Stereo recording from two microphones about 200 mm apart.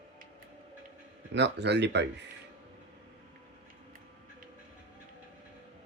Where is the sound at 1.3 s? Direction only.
60° right (ahead or behind).